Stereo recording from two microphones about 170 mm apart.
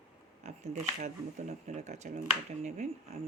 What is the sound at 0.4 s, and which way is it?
Speech, 40° right (ahead or behind).